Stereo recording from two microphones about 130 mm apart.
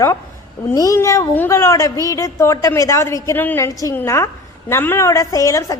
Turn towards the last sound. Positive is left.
turn(degrees=25)  # may be behind; listen again after turning